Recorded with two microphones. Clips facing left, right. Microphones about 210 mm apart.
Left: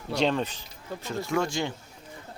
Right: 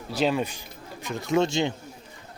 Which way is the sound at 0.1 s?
5° right (ahead or behind).